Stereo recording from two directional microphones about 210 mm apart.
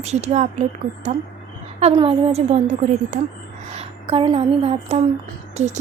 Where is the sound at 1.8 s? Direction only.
25° right (ahead or behind).